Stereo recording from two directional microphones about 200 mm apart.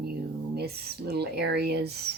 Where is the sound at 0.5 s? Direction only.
55° right (ahead or behind).